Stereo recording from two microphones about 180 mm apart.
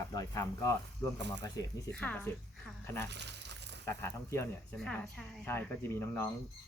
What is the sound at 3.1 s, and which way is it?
Speech, 70° right (ahead or behind).